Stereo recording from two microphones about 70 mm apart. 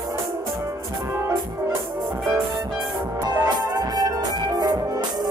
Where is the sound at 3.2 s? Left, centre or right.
Right.